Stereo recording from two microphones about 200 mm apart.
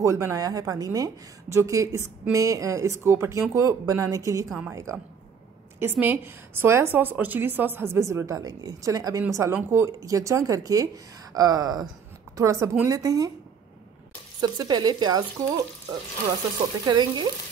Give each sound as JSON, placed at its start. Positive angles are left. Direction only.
{"t": 0.0, "sound": "a woman's voice", "side_deg": -15}
{"t": 14.4, "sound": "speech", "side_deg": -20}
{"t": 16.8, "sound": "speech", "side_deg": -20}